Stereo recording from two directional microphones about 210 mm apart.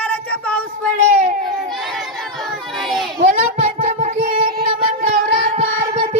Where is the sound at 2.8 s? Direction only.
Centre (ahead or behind).